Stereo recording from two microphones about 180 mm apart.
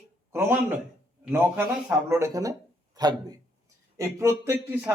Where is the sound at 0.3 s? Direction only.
10° right (ahead or behind).